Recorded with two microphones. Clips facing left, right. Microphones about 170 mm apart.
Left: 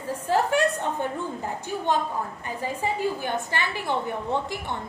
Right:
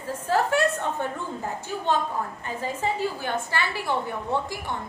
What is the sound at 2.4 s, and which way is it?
A woman's voice, 15° left (ahead or behind).